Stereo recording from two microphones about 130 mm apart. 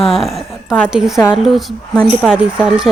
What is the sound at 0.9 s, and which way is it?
Speech, 5° right (ahead or behind).